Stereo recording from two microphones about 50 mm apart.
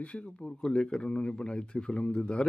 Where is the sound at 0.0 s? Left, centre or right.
Left.